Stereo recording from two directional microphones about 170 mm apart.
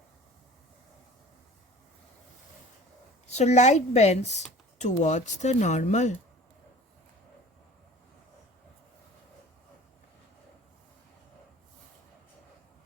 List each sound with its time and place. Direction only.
3.2 s a woman's voice: 40° left (ahead or behind)